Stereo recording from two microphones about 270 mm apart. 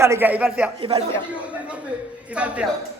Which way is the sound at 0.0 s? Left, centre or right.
Centre.